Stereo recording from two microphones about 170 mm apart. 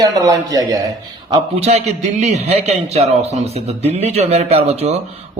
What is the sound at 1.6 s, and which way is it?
A man's voice, 40° right (ahead or behind).